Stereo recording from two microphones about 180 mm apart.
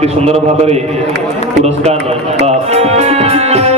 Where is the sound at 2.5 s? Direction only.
35° right (ahead or behind).